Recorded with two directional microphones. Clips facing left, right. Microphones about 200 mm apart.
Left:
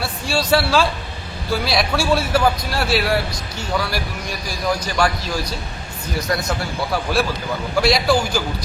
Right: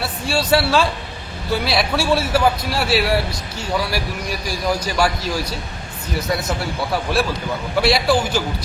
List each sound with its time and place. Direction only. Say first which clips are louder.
0.0 s a man's voice: right 1 dB; 5° right (ahead or behind)
6.9 s a man's voice: even; centre (ahead or behind)